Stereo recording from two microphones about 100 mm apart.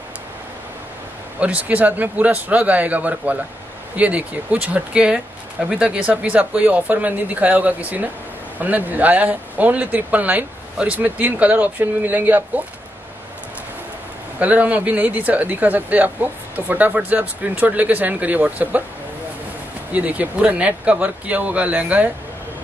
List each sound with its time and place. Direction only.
1.4 s speech: 15° right (ahead or behind)
14.4 s speech: 15° right (ahead or behind)
19.9 s speech: 15° right (ahead or behind)